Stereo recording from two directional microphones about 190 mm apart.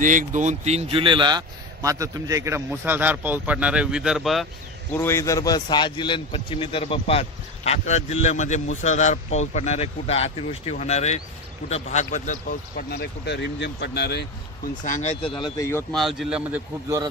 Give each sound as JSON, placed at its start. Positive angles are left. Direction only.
{"t": 0.0, "sound": "a man's voice", "side_deg": -40}
{"t": 4.9, "sound": "a man's voice", "side_deg": 15}
{"t": 14.9, "sound": "a man's voice", "side_deg": 35}
{"t": 15.5, "sound": "speech", "side_deg": 15}
{"t": 15.9, "sound": "speech", "side_deg": 0}